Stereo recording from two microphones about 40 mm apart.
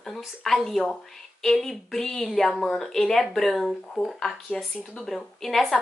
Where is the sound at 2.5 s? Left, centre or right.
Centre.